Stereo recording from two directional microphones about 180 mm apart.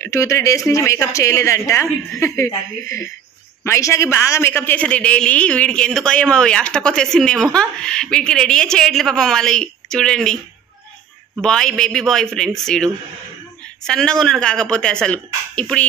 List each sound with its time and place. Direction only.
0.0 s a man's voice: 15° left (ahead or behind)
11.4 s speech: 5° left (ahead or behind)